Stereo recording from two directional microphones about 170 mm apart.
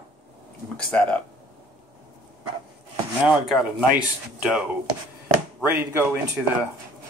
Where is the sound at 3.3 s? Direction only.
5° right (ahead or behind).